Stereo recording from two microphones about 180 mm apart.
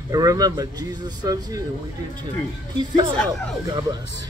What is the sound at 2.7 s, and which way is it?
Speech, 25° right (ahead or behind).